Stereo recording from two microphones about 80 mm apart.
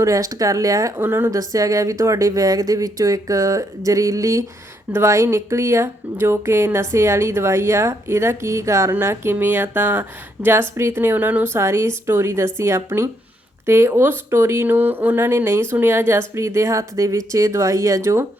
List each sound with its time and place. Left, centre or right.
0.0 s speech: right
1.0 s speech: right
1.3 s speech: right